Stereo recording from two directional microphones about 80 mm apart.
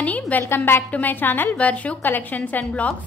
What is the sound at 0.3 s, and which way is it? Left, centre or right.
A woman's voice, left.